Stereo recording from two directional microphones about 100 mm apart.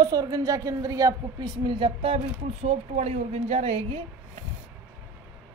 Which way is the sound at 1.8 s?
70° right (ahead or behind).